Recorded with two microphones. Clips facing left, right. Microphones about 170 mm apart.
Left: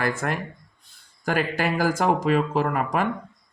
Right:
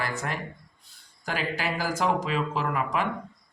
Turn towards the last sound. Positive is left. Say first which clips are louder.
# left 4 dB
turn(degrees=50)  # may be behind; listen again after turning